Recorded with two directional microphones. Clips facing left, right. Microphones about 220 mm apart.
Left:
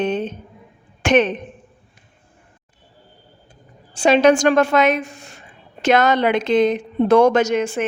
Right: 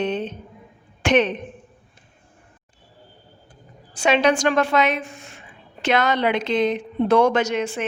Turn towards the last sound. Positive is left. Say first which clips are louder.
# left 4 dB
turn(degrees=45)  # may be behind; listen again after turning